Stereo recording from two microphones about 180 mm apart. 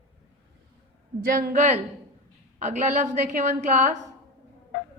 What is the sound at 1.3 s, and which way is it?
A woman's voice, 50° right (ahead or behind).